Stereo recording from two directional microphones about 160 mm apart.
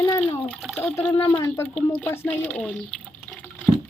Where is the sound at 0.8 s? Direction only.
10° left (ahead or behind).